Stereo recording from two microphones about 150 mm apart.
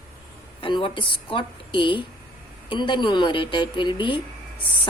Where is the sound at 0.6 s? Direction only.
35° left (ahead or behind).